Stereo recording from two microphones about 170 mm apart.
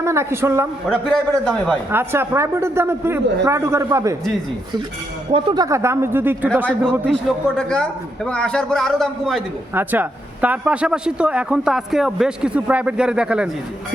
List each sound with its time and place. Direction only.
0.0 s a man's voice: 15° right (ahead or behind)
1.0 s speech: 5° left (ahead or behind)
1.9 s a man's voice: 15° right (ahead or behind)
5.3 s a man's voice: 25° right (ahead or behind)
7.1 s speech: 5° left (ahead or behind)
9.7 s speech: 10° right (ahead or behind)